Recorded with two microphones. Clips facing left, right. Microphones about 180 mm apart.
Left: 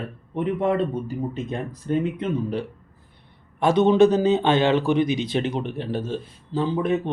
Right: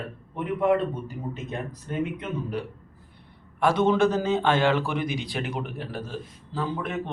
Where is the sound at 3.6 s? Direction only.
20° left (ahead or behind).